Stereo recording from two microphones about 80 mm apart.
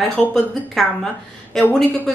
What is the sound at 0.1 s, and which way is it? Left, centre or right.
A woman's voice, centre.